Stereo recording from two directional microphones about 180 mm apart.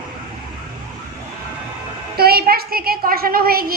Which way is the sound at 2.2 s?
60° right (ahead or behind).